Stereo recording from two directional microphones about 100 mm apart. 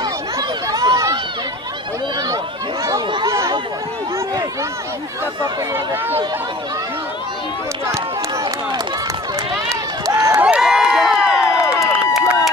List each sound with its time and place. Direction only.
0.0 s chatter: 40° right (ahead or behind)
2.2 s a sound: 35° right (ahead or behind)
3.3 s chatter: 30° right (ahead or behind)
10.0 s run: 30° right (ahead or behind)
10.4 s crowd: 10° right (ahead or behind)
11.8 s a sound: 5° right (ahead or behind)